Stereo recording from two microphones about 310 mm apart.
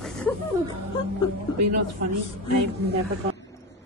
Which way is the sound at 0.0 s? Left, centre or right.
Centre.